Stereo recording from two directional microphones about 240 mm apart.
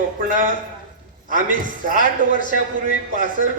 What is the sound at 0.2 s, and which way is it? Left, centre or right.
Speech, right.